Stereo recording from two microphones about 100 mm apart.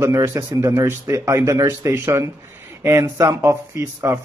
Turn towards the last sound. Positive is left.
turn(degrees=-25)  # may be behind; listen again after turning